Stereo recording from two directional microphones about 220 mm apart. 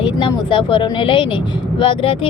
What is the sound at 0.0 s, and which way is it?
Speech, 20° left (ahead or behind).